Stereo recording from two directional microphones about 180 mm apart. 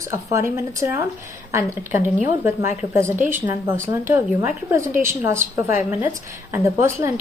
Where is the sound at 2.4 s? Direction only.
15° right (ahead or behind).